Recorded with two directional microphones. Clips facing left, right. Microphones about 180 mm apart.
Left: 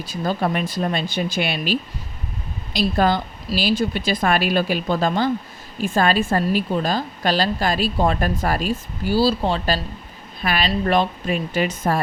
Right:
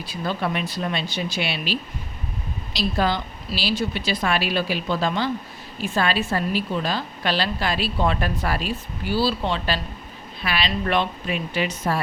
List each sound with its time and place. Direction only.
0.0 s a woman's voice: 45° left (ahead or behind)